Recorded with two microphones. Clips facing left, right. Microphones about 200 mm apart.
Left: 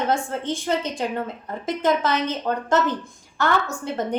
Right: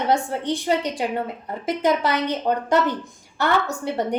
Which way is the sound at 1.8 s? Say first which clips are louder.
Even; 15° right (ahead or behind).